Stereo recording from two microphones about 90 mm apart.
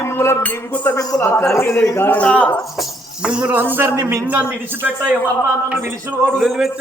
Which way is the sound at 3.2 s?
10° right (ahead or behind).